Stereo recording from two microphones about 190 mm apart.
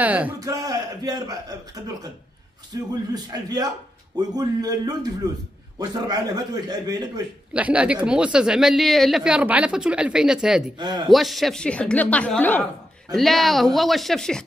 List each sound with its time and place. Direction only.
0.0 s a man's voice: 5° right (ahead or behind)
0.4 s a man's voice: 20° right (ahead or behind)
2.7 s a man's voice: 20° right (ahead or behind)
7.5 s speech: 5° right (ahead or behind)
10.8 s a man's voice: 25° right (ahead or behind)
11.1 s speech: centre (ahead or behind)